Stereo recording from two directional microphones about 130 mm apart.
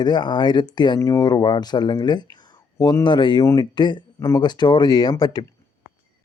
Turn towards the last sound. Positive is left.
turn(degrees=30)  # may be behind; listen again after turning